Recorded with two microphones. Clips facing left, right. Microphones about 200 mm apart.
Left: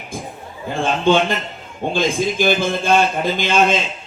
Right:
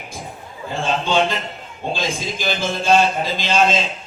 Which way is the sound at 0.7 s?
55° left (ahead or behind).